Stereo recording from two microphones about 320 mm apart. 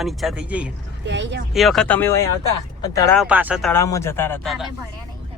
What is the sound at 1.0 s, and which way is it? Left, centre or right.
Speech, right.